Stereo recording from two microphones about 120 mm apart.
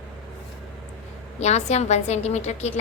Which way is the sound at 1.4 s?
65° left (ahead or behind).